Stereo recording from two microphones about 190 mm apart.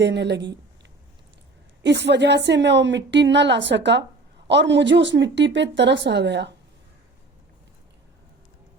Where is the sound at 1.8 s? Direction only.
65° right (ahead or behind).